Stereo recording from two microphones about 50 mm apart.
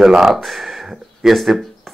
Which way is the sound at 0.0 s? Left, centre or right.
Centre.